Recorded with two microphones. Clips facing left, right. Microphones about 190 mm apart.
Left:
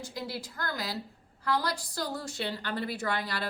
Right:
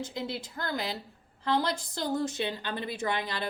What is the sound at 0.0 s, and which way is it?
A woman's voice, 25° right (ahead or behind).